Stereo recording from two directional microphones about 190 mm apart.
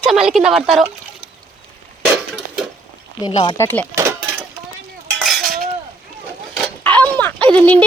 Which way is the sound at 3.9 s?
15° right (ahead or behind).